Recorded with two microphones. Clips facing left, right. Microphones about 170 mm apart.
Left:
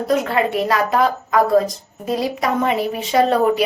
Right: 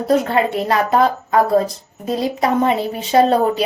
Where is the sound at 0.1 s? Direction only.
30° right (ahead or behind).